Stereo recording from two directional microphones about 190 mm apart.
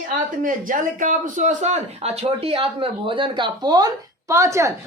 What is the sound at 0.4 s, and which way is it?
A man's voice, 45° right (ahead or behind).